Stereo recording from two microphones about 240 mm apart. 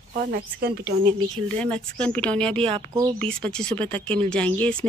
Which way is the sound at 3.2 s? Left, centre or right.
Centre.